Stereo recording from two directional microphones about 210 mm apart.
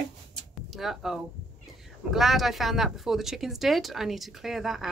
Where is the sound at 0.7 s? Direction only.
Centre (ahead or behind).